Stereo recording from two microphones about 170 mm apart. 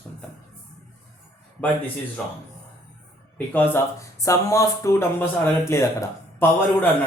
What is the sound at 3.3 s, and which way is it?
Speech, 10° left (ahead or behind).